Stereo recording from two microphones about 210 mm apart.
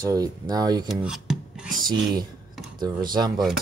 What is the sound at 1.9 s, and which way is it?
Speech, 20° right (ahead or behind).